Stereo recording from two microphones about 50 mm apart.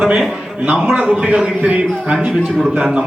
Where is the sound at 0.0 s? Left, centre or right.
Centre.